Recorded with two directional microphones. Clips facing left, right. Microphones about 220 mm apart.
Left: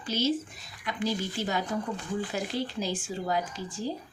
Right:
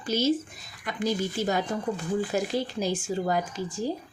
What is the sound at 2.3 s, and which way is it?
Speech, 45° right (ahead or behind).